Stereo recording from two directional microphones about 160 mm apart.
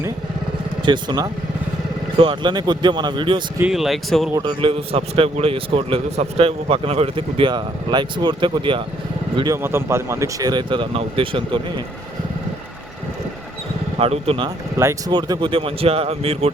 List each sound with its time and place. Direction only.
0.9 s speech: 25° right (ahead or behind)
3.6 s speech: centre (ahead or behind)
4.4 s a man's voice: 30° right (ahead or behind)
9.6 s speech: 15° right (ahead or behind); by 11.6 s 30° right (ahead or behind)
14.0 s a man's voice: 35° right (ahead or behind)
14.8 s speech: 15° right (ahead or behind)
15.1 s a man's voice: 30° right (ahead or behind)